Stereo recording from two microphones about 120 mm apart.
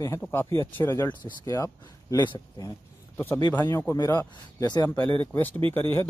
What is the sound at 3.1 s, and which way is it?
Speech, 20° left (ahead or behind).